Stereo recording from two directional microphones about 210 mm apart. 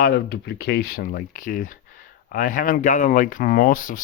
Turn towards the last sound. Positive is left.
turn(degrees=40)  # may be behind; listen again after turning